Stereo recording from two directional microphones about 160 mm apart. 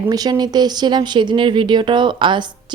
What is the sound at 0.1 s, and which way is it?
Speech, 25° right (ahead or behind).